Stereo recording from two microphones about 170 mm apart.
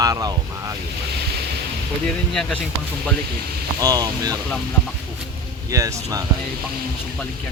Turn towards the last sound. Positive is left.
turn(degrees=-20)  # may be behind; listen again after turning